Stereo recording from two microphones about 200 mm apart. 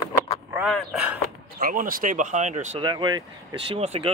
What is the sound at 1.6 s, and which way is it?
Speech, 45° right (ahead or behind).